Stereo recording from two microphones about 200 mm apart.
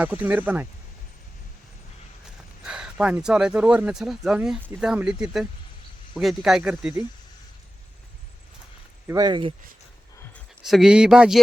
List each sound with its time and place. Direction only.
0.0 s speech: 10° right (ahead or behind)
2.2 s speech: 5° right (ahead or behind)
9.0 s speech: 20° right (ahead or behind)
10.3 s speech: centre (ahead or behind)